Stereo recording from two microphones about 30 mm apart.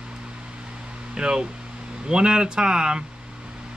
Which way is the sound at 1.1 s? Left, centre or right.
Right.